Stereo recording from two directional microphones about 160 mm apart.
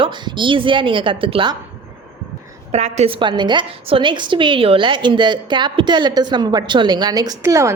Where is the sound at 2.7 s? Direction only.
45° right (ahead or behind).